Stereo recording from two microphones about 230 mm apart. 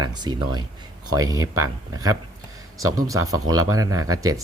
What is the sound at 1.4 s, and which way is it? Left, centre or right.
Speech, right.